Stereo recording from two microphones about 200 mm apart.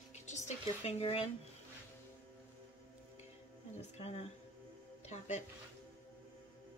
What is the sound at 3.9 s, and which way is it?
A woman's voice, 30° left (ahead or behind).